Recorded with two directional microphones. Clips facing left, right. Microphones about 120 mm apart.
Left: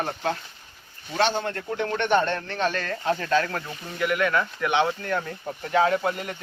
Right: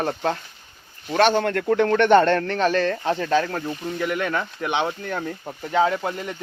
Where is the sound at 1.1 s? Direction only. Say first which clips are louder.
Right 6 dB; 60° right (ahead or behind).